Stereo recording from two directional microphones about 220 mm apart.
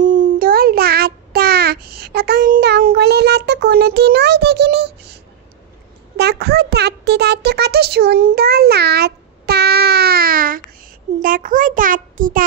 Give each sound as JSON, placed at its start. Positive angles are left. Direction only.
{"t": 0.0, "sound": "child singing", "side_deg": -35}
{"t": 6.1, "sound": "a sound", "side_deg": -45}
{"t": 11.1, "sound": "a child's voice", "side_deg": -40}